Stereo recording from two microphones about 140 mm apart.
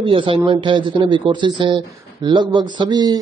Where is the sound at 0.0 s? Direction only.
35° right (ahead or behind).